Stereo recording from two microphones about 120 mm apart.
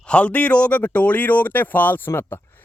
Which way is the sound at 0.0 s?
10° left (ahead or behind).